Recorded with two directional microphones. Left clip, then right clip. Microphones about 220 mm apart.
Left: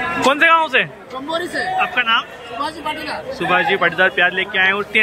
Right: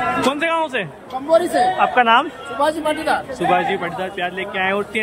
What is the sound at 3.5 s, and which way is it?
Speech, 10° right (ahead or behind).